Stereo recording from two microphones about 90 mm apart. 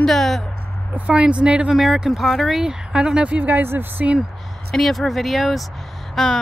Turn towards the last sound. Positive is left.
turn(degrees=0)  # may be behind; listen again after turning